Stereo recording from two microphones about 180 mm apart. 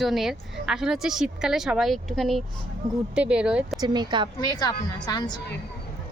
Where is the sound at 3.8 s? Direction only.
25° right (ahead or behind).